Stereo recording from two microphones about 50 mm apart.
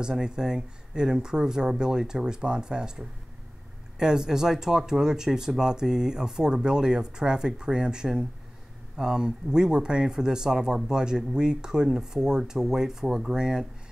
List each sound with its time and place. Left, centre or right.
0.0 s speech: centre